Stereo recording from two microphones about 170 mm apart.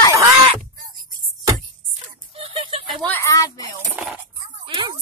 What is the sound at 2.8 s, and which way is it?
Speech, 10° left (ahead or behind).